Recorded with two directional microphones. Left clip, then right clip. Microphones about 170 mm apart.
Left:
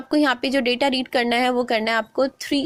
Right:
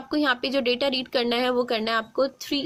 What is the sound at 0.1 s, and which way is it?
Speech, 25° left (ahead or behind).